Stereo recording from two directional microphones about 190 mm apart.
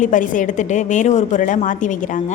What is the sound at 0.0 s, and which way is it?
A woman's voice, 45° left (ahead or behind).